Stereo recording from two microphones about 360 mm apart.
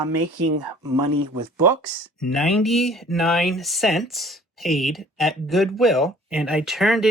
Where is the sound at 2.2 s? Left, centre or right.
Centre.